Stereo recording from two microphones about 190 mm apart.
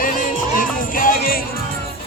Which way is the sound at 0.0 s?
45° left (ahead or behind).